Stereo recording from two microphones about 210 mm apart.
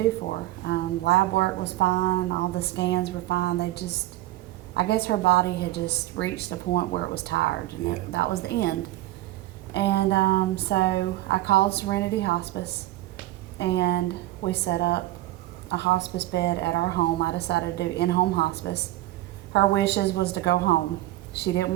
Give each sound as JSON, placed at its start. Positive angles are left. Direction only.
{"t": 0.6, "sound": "a woman's voice", "side_deg": 55}
{"t": 9.7, "sound": "a woman's voice", "side_deg": 55}